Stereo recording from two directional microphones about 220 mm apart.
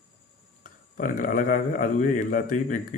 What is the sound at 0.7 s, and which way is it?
Speech, 40° left (ahead or behind).